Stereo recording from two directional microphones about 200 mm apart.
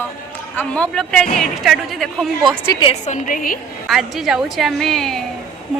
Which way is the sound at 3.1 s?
40° left (ahead or behind).